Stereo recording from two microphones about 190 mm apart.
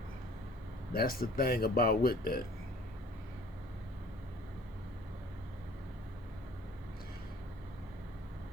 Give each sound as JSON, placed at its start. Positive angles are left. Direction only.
{"t": 0.9, "sound": "speech", "side_deg": 50}